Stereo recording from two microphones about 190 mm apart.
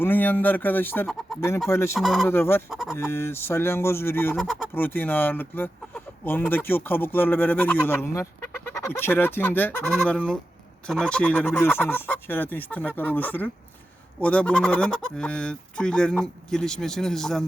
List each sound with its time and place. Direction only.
0.0 s speech: 10° left (ahead or behind)
2.0 s speech: centre (ahead or behind)
2.2 s speech: 10° left (ahead or behind)
2.6 s speech: centre (ahead or behind)
2.9 s speech: 15° left (ahead or behind)
4.4 s speech: 5° right (ahead or behind)
4.7 s speech: 10° left (ahead or behind)